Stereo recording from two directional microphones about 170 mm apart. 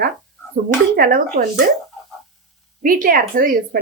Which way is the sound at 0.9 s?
55° right (ahead or behind).